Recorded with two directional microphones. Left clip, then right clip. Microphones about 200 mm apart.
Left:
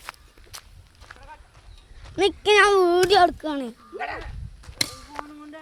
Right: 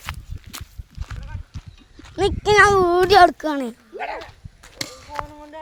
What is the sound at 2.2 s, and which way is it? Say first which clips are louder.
Speech: right 3 dB; centre (ahead or behind).